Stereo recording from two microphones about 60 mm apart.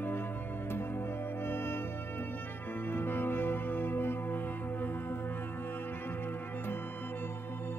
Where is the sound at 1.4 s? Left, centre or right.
Left.